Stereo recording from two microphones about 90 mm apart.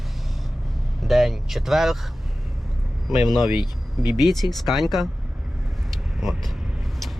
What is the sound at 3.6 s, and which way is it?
Speech, 55° left (ahead or behind).